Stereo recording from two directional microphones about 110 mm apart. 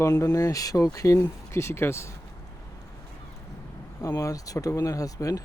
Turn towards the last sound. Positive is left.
turn(degrees=35)  # may be behind; listen again after turning